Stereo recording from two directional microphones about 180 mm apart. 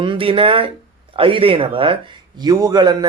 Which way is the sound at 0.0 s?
30° right (ahead or behind).